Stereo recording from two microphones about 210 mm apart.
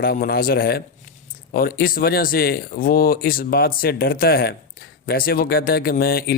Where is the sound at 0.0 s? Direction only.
45° left (ahead or behind).